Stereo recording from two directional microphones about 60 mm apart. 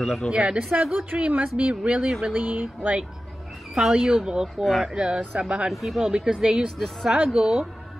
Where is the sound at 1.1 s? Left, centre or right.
Centre.